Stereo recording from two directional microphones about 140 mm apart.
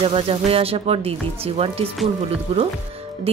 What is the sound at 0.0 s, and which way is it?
A woman's voice, 40° right (ahead or behind).